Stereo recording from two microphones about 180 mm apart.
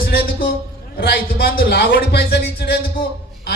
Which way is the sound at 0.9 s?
55° left (ahead or behind).